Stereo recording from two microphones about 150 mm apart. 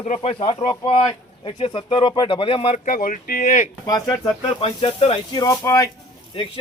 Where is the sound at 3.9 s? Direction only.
25° left (ahead or behind).